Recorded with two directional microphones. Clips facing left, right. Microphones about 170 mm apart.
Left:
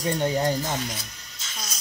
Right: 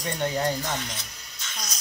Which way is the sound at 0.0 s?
25° left (ahead or behind).